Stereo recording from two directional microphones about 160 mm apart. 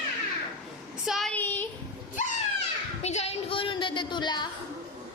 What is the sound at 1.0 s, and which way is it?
Speech, centre (ahead or behind).